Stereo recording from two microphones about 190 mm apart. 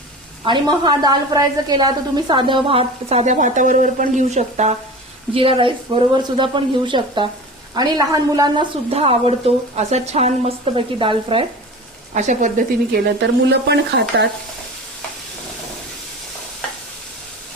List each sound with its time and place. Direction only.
0.4 s a woman's voice: 25° right (ahead or behind)
8.9 s a woman's voice: 30° right (ahead or behind)
12.1 s a woman's voice: 40° right (ahead or behind)
13.2 s speech: 65° right (ahead or behind)